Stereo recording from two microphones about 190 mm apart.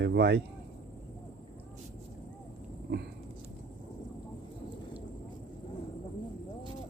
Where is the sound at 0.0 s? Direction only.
65° right (ahead or behind).